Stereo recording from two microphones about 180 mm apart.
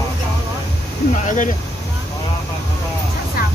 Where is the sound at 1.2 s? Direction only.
45° left (ahead or behind).